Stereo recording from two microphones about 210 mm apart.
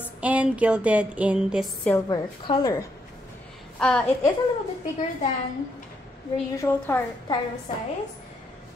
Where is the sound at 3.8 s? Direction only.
5° left (ahead or behind).